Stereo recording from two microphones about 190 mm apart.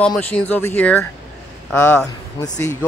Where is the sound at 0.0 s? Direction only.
5° left (ahead or behind).